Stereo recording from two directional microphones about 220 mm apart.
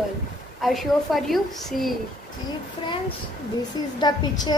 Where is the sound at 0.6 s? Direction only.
Centre (ahead or behind).